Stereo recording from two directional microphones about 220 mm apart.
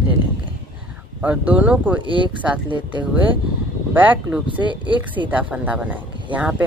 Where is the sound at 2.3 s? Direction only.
5° right (ahead or behind).